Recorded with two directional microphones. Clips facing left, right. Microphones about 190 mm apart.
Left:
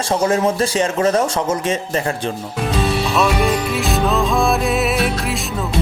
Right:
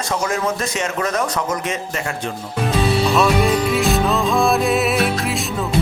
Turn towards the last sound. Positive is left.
turn(degrees=0)  # may be behind; listen again after turning